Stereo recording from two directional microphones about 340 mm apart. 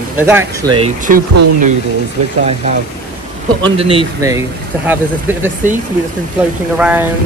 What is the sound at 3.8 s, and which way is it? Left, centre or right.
Speech, centre.